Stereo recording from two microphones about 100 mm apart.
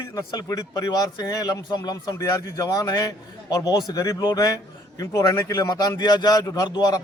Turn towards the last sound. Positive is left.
turn(degrees=40)  # may be behind; listen again after turning